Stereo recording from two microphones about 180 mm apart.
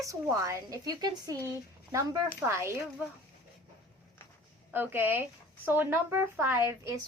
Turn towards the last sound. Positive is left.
turn(degrees=-15)  # may be behind; listen again after turning